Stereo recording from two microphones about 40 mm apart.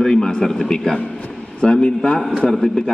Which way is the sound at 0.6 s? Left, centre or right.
Centre.